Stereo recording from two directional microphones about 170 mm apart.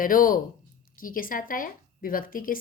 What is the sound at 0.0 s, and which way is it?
A woman's voice, 55° left (ahead or behind).